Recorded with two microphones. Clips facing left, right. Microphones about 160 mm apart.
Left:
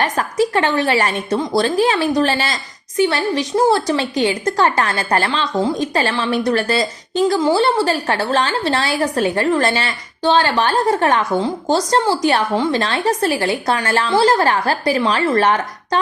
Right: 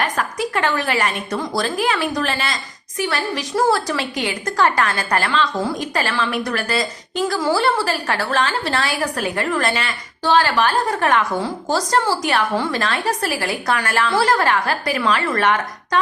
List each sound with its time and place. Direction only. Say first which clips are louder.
0.0 s a woman's voice: left 5 dB; 30° left (ahead or behind)